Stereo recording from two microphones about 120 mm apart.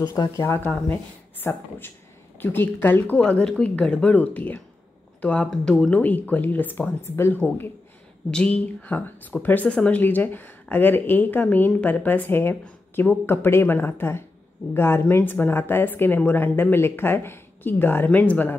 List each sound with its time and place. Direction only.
0.0 s speech: 30° left (ahead or behind)
3.2 s speech: 5° left (ahead or behind)